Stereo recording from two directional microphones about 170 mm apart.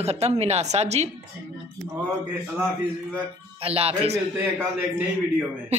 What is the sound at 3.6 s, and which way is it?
Speech, 35° right (ahead or behind).